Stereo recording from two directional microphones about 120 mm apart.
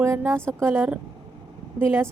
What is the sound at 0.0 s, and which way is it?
A woman's voice, 20° right (ahead or behind).